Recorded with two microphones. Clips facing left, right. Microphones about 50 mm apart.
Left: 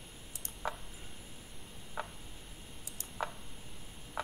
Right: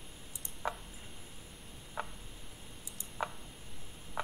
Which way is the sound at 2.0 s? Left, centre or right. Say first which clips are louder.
Even; right.